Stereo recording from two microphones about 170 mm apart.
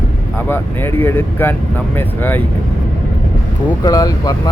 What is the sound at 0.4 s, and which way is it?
Speech, 15° left (ahead or behind).